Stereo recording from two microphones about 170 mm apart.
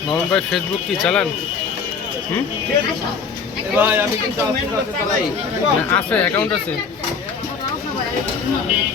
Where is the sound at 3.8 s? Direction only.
10° right (ahead or behind).